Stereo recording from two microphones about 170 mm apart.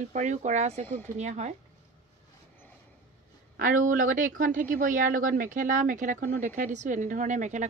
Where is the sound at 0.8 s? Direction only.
15° left (ahead or behind).